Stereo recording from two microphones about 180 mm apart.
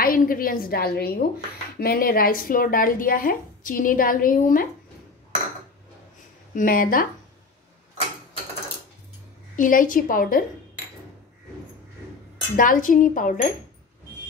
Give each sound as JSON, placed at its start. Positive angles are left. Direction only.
{"t": 0.0, "sound": "a woman's voice", "side_deg": 55}
{"t": 6.5, "sound": "speech", "side_deg": 50}
{"t": 9.6, "sound": "speech", "side_deg": 50}
{"t": 12.5, "sound": "speech", "side_deg": 50}